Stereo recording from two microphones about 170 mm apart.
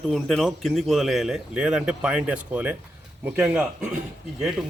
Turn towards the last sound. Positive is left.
turn(degrees=0)  # may be behind; listen again after turning